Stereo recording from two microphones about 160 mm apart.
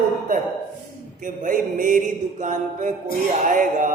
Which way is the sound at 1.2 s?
55° right (ahead or behind).